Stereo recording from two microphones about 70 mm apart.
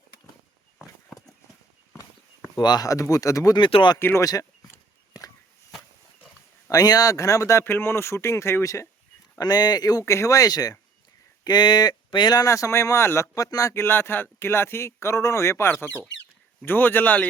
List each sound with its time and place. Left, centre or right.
2.6 s speech: left
2.8 s speech: left
3.9 s speech: left
4.2 s speech: left
6.7 s speech: left
7.6 s speech: left
9.4 s speech: left
10.0 s speech: left
11.4 s speech: left
12.5 s speech: left
13.3 s speech: left
13.7 s speech: left
15.7 s speech: left